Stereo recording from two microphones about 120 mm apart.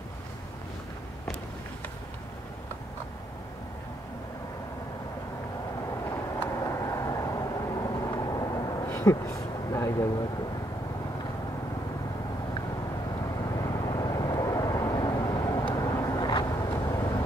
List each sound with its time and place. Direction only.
6.0 s vehicle: 20° left (ahead or behind); by 8.8 s 35° left (ahead or behind)
8.8 s a sound: 20° left (ahead or behind)
13.4 s vehicle: 30° left (ahead or behind)